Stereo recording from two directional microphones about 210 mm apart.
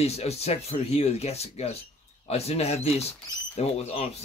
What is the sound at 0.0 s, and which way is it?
Speech, 30° left (ahead or behind).